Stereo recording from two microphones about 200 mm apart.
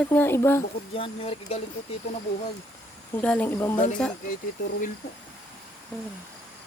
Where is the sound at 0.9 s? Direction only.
30° left (ahead or behind).